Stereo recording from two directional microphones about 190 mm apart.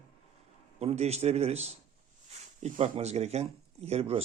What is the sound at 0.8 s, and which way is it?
Speech, 35° right (ahead or behind).